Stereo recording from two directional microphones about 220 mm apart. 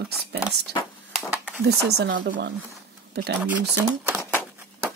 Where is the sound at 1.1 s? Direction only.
10° right (ahead or behind).